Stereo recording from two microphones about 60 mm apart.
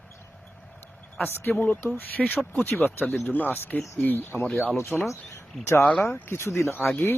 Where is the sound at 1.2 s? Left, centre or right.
Left.